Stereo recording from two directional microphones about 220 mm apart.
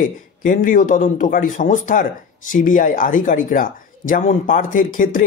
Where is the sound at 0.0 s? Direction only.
35° left (ahead or behind).